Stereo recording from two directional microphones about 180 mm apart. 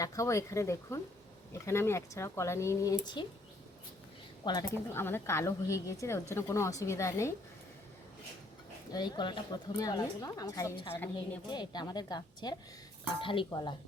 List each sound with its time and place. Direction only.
0.0 s a woman's voice: 15° left (ahead or behind)
4.4 s a woman's voice: 20° left (ahead or behind)
8.9 s a woman's voice: 25° left (ahead or behind)